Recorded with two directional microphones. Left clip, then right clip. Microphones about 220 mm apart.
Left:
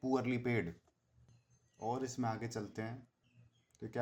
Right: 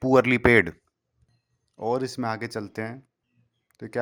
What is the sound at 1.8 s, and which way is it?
Speech, 45° right (ahead or behind).